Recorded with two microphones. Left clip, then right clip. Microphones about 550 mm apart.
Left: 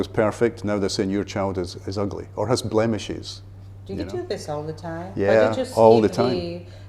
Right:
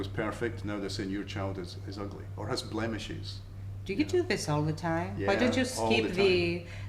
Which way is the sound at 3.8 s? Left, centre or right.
Right.